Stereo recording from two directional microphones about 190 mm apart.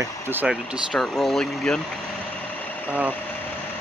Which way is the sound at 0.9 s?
Centre (ahead or behind).